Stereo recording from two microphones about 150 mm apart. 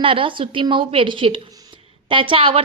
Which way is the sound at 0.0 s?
35° right (ahead or behind).